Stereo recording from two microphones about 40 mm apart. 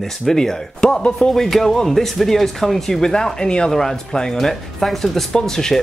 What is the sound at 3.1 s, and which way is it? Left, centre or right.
Speech, centre.